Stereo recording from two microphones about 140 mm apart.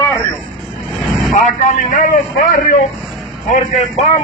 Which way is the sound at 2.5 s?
90° left.